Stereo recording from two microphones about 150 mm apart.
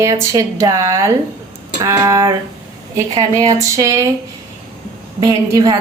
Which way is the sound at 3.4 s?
20° right (ahead or behind).